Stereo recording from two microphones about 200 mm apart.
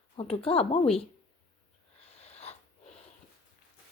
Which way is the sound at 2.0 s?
30° left (ahead or behind).